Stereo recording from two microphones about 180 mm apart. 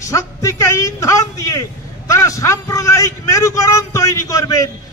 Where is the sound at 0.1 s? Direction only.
15° left (ahead or behind).